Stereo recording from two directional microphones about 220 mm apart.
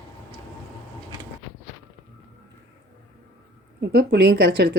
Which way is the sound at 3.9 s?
50° right (ahead or behind).